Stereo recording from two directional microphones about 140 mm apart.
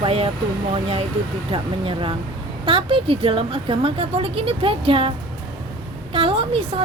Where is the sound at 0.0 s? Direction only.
45° right (ahead or behind).